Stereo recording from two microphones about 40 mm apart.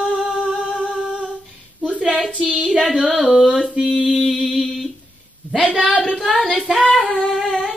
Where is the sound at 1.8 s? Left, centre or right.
Right.